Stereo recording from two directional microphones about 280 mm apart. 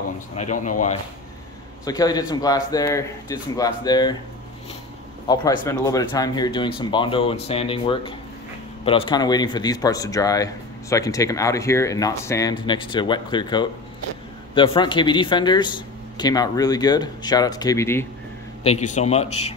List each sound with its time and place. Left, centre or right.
0.4 s speech: left
1.9 s speech: centre
5.3 s speech: centre
18.6 s speech: left